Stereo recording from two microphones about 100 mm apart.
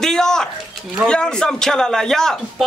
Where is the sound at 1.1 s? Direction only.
5° left (ahead or behind).